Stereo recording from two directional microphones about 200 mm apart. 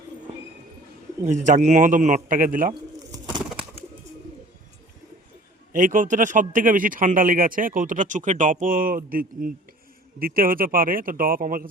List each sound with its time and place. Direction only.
1.2 s a man's voice: 35° right (ahead or behind)
5.7 s speech: 40° right (ahead or behind)